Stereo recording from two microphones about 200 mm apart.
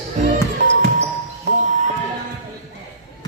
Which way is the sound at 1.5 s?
35° right (ahead or behind).